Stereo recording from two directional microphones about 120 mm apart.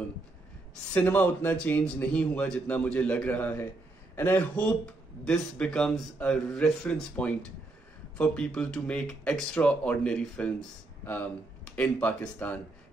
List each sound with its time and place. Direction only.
0.9 s a man's voice: 15° left (ahead or behind)